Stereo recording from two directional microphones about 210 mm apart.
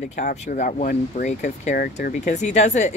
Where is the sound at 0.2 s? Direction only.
35° left (ahead or behind).